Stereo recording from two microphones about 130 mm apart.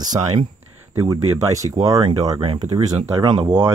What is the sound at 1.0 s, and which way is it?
Speech, 25° right (ahead or behind).